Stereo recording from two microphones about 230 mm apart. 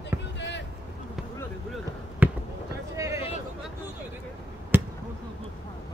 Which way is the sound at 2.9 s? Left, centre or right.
Centre.